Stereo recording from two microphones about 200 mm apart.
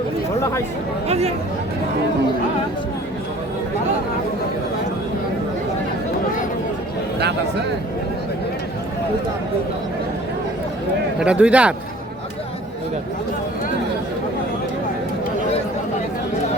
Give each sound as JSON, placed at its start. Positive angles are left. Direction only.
{"t": 1.0, "sound": "speech", "side_deg": -30}
{"t": 11.2, "sound": "speech", "side_deg": -5}